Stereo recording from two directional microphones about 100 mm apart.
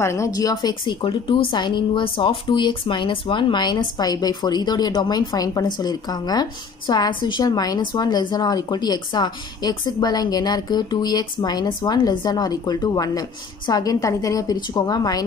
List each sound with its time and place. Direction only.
0.0 s speech: 30° left (ahead or behind)
0.3 s speech: 40° left (ahead or behind)
1.0 s a woman's voice: 55° left (ahead or behind)